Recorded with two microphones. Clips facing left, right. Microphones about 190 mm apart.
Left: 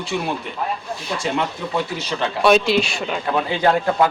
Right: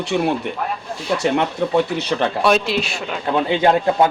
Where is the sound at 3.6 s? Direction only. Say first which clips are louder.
Right 1 dB; 20° right (ahead or behind).